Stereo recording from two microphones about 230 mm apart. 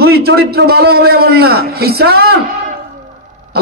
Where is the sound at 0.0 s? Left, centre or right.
Right.